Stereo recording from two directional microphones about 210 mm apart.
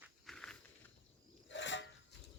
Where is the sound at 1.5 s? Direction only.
60° left (ahead or behind).